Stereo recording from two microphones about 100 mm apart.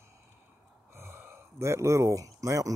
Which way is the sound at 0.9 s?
25° right (ahead or behind).